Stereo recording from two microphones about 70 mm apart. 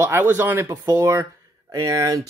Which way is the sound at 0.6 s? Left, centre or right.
Right.